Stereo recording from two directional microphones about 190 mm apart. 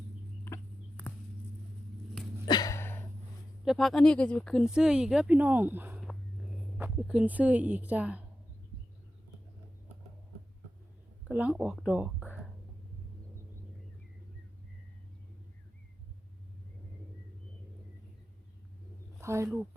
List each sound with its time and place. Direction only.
0.4 s chicken: 10° left (ahead or behind)
2.5 s a sound: 20° left (ahead or behind)
3.6 s speech: centre (ahead or behind)
11.3 s speech: 10° right (ahead or behind)
19.2 s speech: 15° right (ahead or behind)